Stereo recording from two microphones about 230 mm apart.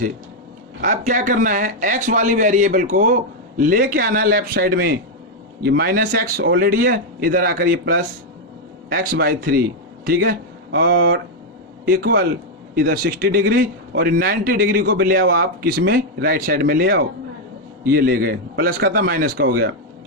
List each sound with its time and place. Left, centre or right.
0.8 s a man's voice: right